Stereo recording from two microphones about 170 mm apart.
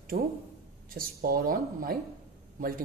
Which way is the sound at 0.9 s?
60° right (ahead or behind).